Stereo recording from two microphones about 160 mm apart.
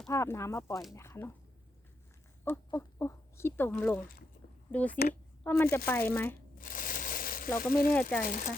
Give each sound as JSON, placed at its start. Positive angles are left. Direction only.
{"t": 0.1, "sound": "speech", "side_deg": 15}
{"t": 2.6, "sound": "speech", "side_deg": 20}
{"t": 5.4, "sound": "shuffling cards", "side_deg": 10}
{"t": 5.7, "sound": "speech", "side_deg": 15}
{"t": 6.6, "sound": "a sound", "side_deg": 60}
{"t": 7.6, "sound": "speech", "side_deg": 65}